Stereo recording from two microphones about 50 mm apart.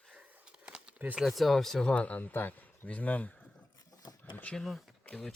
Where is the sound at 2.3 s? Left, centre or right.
Left.